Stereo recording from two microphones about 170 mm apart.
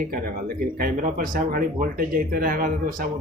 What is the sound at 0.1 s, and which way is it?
Speech, 60° right (ahead or behind).